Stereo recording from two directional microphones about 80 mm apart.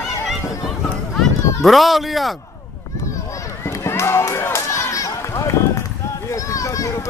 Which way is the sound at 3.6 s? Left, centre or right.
Left.